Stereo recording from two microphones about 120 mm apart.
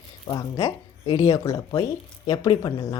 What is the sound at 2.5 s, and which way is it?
Speech, 45° left (ahead or behind).